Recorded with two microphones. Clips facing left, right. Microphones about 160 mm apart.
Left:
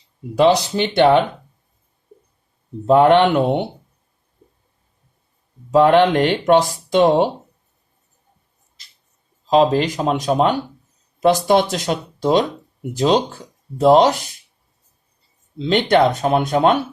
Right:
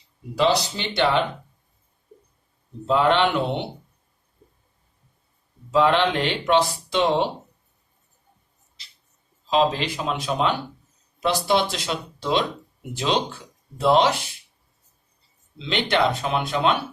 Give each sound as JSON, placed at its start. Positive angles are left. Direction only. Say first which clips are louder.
{"t": 0.3, "sound": "speech", "louder": "left 7 dB", "side_deg": 50}
{"t": 2.8, "sound": "speech", "louder": "left 7 dB", "side_deg": 50}
{"t": 5.7, "sound": "speech", "louder": "left 7 dB", "side_deg": 50}
{"t": 8.8, "sound": "a sound", "louder": "right 1 dB", "side_deg": 45}
{"t": 9.5, "sound": "speech", "louder": "left 6 dB", "side_deg": 45}
{"t": 15.5, "sound": "speech", "louder": "left 8 dB", "side_deg": 45}